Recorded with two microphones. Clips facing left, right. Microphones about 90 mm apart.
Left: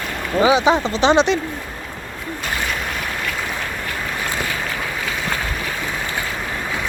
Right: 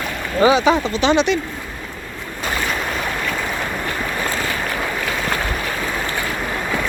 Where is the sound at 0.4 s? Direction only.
20° left (ahead or behind).